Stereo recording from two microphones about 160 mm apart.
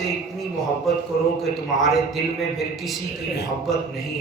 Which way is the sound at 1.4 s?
Centre (ahead or behind).